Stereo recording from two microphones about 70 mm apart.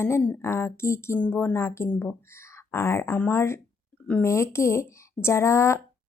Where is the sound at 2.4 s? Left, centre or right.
Left.